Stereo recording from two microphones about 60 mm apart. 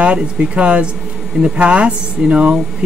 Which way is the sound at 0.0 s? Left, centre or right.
Centre.